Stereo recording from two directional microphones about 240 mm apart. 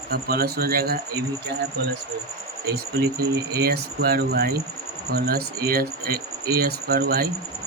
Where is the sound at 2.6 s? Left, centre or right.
Right.